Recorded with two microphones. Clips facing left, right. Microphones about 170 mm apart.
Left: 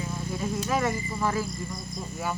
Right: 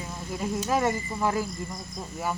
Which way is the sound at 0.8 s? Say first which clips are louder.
Right 1 dB; 15° right (ahead or behind).